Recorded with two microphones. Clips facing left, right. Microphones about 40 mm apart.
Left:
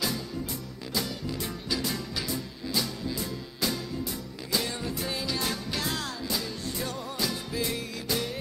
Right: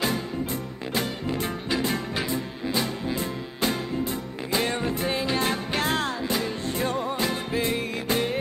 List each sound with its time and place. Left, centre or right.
0.9 s music: right